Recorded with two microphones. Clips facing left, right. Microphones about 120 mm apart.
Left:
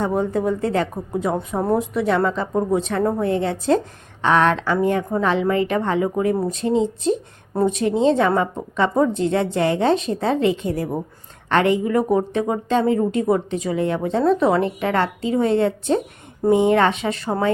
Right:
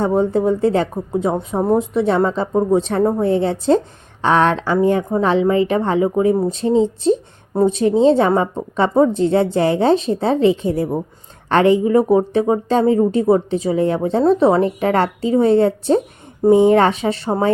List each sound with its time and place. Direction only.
0.0 s speech: 30° right (ahead or behind)
2.7 s a woman's voice: 30° right (ahead or behind)
6.5 s a woman's voice: 30° right (ahead or behind)
7.5 s speech: 20° right (ahead or behind)
7.8 s a woman's voice: 35° right (ahead or behind)